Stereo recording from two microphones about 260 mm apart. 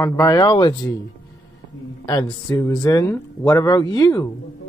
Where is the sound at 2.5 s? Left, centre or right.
Centre.